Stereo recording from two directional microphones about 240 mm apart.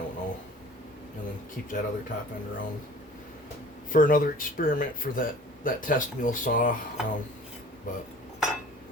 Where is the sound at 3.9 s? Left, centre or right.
Left.